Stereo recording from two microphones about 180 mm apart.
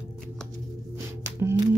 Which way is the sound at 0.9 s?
15° right (ahead or behind).